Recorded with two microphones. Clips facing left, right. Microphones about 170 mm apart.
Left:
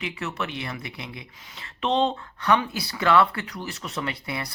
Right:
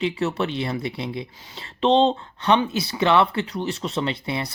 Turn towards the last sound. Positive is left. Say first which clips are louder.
# right 5 dB
turn(degrees=-25)  # may be behind; listen again after turning